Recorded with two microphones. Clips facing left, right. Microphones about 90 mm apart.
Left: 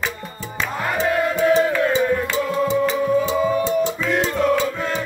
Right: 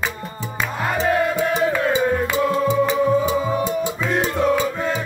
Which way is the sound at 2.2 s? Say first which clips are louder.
Right 2 dB; 15° right (ahead or behind).